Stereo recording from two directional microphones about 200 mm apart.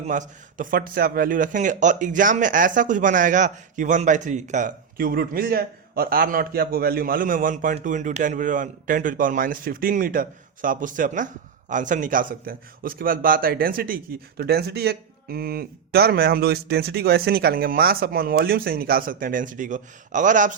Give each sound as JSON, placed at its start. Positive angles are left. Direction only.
{"t": 0.0, "sound": "a man's voice", "side_deg": -40}